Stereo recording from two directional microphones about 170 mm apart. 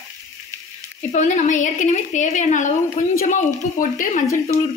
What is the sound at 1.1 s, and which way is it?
A woman's voice, 45° left (ahead or behind).